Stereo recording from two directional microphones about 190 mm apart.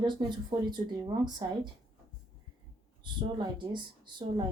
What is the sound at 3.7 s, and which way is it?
Speech, 25° right (ahead or behind).